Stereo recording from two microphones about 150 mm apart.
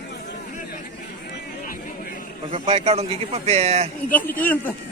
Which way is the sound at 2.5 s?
40° right (ahead or behind).